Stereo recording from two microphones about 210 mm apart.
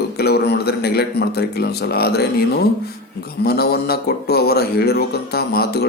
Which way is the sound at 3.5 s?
50° left (ahead or behind).